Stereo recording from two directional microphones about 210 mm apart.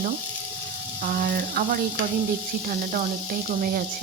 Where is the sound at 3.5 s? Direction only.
45° right (ahead or behind).